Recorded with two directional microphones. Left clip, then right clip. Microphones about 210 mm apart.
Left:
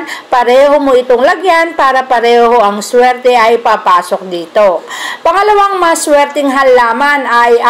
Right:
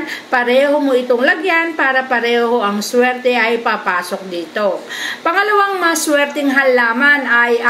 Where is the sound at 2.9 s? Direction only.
5° left (ahead or behind).